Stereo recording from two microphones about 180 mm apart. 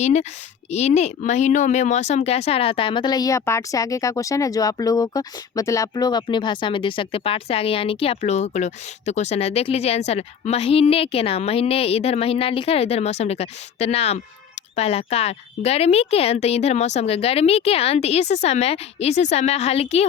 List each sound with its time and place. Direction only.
0.0 s speech: 40° left (ahead or behind)